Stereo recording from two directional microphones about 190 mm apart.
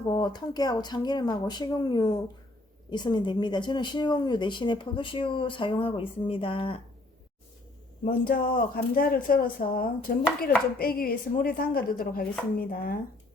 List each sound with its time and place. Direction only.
0.1 s speech: 20° left (ahead or behind)
8.0 s speech: 50° left (ahead or behind)